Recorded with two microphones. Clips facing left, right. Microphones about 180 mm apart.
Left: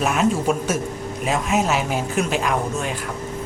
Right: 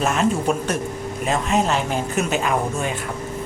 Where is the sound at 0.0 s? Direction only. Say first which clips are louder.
Even; 5° left (ahead or behind).